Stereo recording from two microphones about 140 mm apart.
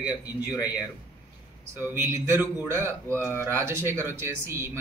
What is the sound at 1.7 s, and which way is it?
Speech, 15° right (ahead or behind).